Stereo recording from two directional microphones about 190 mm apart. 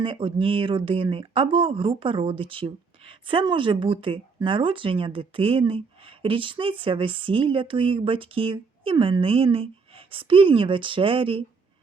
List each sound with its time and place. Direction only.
0.0 s speech: 25° right (ahead or behind)